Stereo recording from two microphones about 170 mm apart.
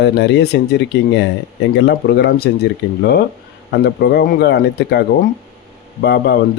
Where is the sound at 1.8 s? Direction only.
80° left.